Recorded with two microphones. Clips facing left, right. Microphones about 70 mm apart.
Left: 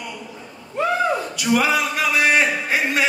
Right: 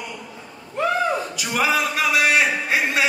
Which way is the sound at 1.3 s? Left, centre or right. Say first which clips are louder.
Left 5 dB; centre.